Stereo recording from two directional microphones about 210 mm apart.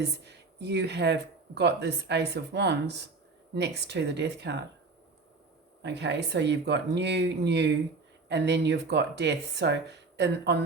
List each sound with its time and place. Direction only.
0.0 s speech: 55° right (ahead or behind)
5.8 s speech: 55° right (ahead or behind)